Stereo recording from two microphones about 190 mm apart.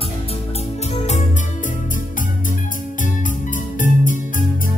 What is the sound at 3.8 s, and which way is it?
Music, 45° left (ahead or behind).